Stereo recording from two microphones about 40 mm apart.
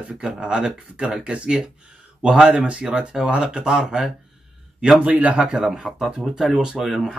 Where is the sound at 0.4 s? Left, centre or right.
Right.